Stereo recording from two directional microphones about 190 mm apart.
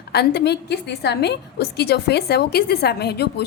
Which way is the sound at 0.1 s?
60° left (ahead or behind).